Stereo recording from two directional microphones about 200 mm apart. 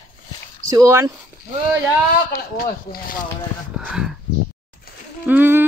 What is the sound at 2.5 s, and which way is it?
Speech, 45° left (ahead or behind).